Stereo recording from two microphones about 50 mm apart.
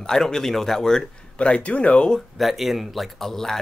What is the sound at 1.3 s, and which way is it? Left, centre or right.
Speech, left.